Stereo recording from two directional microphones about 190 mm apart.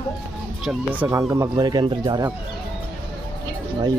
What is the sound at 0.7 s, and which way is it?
Speech, 10° right (ahead or behind).